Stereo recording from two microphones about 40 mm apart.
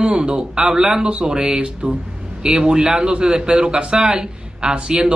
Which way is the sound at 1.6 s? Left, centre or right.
Right.